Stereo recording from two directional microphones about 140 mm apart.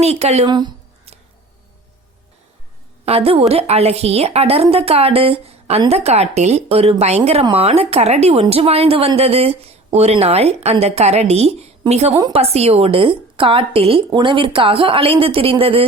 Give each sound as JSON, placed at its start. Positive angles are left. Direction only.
{"t": 0.0, "sound": "speech", "side_deg": -50}
{"t": 0.4, "sound": "a woman's voice", "side_deg": -30}
{"t": 3.1, "sound": "speech", "side_deg": -45}
{"t": 12.1, "sound": "a woman's voice", "side_deg": -30}
{"t": 12.4, "sound": "a woman's voice", "side_deg": -45}